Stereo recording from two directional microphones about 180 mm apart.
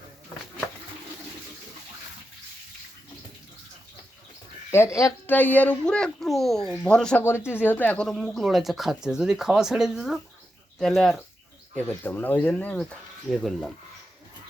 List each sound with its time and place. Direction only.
4.7 s a child's voice: 15° left (ahead or behind)